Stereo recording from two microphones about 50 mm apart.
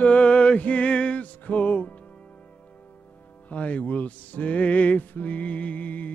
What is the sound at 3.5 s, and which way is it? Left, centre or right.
Music, left.